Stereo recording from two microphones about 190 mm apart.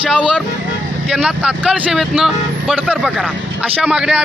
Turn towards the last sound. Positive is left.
turn(degrees=-5)  # may be behind; listen again after turning